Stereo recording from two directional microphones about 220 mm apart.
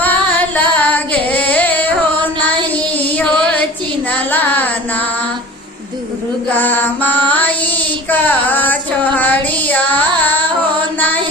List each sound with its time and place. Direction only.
0.0 s singing: 5° left (ahead or behind)
3.1 s music: 5° left (ahead or behind)
4.3 s a sound: 5° left (ahead or behind)
6.5 s music: 10° left (ahead or behind)
8.1 s child singing: 10° left (ahead or behind)